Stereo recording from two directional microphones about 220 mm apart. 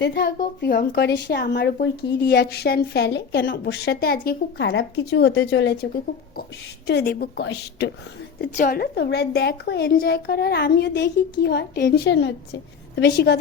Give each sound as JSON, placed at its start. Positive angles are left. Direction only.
{"t": 0.0, "sound": "a woman's voice", "side_deg": 45}
{"t": 8.4, "sound": "a woman's voice", "side_deg": 40}